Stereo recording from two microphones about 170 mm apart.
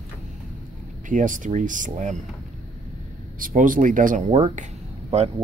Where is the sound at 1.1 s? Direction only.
50° right (ahead or behind).